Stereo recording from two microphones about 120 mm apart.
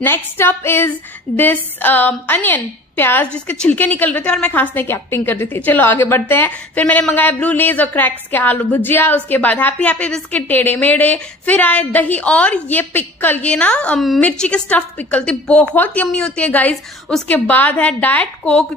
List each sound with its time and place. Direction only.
0.0 s a woman's voice: 20° left (ahead or behind)